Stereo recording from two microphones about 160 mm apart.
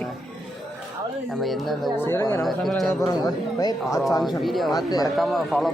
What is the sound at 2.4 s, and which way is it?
Speech, centre (ahead or behind).